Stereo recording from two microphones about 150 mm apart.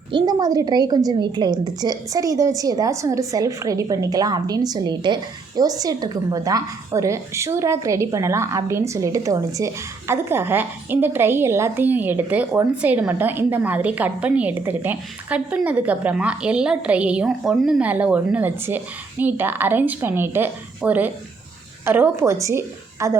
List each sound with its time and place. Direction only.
0.1 s a woman's voice: 25° right (ahead or behind)